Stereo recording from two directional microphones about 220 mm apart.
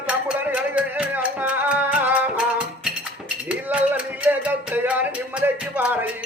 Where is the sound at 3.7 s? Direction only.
5° right (ahead or behind).